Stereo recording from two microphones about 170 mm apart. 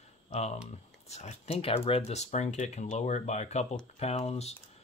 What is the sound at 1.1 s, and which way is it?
Speech, 40° left (ahead or behind).